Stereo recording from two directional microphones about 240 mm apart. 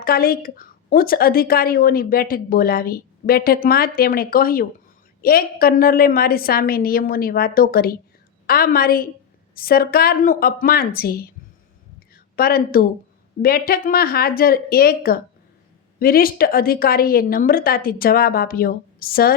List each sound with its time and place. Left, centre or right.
0.0 s a woman's voice: left
12.4 s a woman's voice: left